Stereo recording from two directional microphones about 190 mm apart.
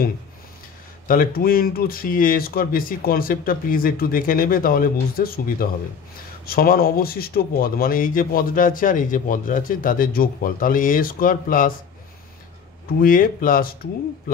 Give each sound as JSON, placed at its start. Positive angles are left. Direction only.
{"t": 1.0, "sound": "speech", "side_deg": 50}
{"t": 13.0, "sound": "speech", "side_deg": 45}